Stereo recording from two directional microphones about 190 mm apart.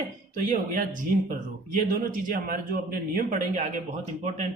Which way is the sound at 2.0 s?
50° right (ahead or behind).